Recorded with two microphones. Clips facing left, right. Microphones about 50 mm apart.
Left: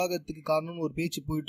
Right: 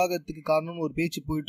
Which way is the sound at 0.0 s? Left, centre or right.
Right.